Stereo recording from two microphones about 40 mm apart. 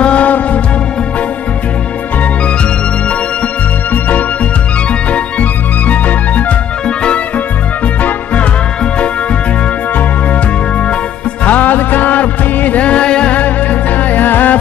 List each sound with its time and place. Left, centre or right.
0.0 s music: left
5.1 s organ: left
11.4 s music: left
13.4 s music: left